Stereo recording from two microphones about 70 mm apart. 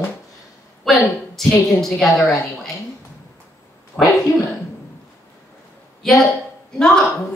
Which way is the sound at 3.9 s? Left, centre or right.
Left.